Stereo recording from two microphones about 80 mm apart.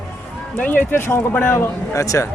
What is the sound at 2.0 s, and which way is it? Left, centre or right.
Speech, left.